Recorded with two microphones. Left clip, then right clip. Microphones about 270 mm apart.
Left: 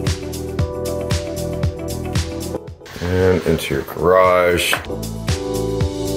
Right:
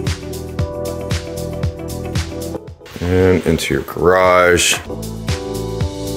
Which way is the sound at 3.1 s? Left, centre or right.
Right.